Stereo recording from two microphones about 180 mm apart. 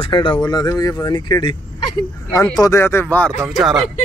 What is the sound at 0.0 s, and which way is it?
Speech, 30° left (ahead or behind).